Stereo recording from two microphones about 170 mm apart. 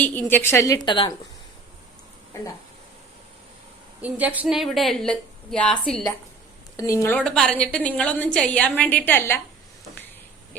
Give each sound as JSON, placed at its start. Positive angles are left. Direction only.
{"t": 0.0, "sound": "a woman's voice", "side_deg": 10}
{"t": 2.3, "sound": "speech", "side_deg": 15}
{"t": 4.0, "sound": "a woman's voice", "side_deg": -10}
{"t": 6.7, "sound": "a woman's voice", "side_deg": 15}